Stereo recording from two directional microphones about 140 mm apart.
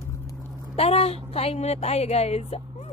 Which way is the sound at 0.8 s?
45° left (ahead or behind).